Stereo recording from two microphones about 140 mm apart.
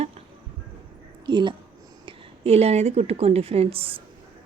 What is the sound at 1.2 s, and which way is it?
Speech, 35° right (ahead or behind).